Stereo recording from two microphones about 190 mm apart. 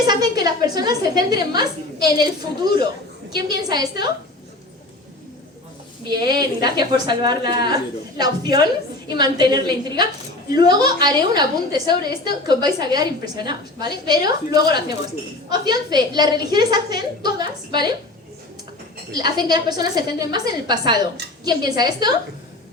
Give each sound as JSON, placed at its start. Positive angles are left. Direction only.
{"t": 0.1, "sound": "a woman's voice", "side_deg": -20}
{"t": 6.1, "sound": "a woman's voice", "side_deg": -20}
{"t": 19.1, "sound": "a woman's voice", "side_deg": -20}